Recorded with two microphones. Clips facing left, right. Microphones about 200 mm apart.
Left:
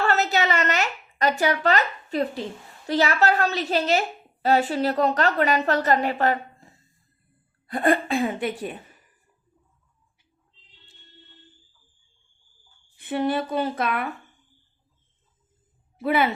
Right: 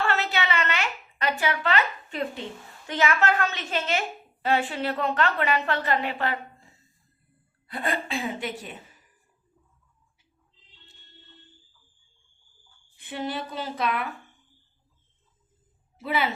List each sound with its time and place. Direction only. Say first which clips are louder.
0.0 s a sound: left 4 dB; 40° left (ahead or behind)
2.8 s a woman's voice: left 3 dB; 35° left (ahead or behind)
7.7 s a woman's voice: left 8 dB; 50° left (ahead or behind)
13.0 s a woman's voice: left 7 dB; 55° left (ahead or behind)
16.0 s a woman's voice: left 5 dB; 55° left (ahead or behind)